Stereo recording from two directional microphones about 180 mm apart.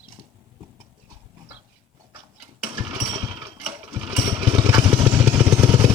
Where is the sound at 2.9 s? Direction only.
25° right (ahead or behind).